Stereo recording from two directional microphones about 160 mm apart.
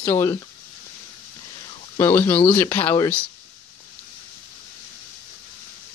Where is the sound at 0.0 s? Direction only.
15° left (ahead or behind).